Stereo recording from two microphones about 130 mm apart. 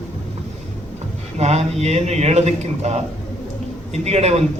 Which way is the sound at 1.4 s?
60° right (ahead or behind).